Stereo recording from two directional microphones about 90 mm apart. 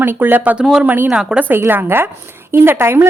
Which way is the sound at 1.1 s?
10° right (ahead or behind).